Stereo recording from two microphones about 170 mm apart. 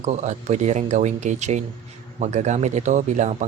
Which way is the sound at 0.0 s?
40° right (ahead or behind).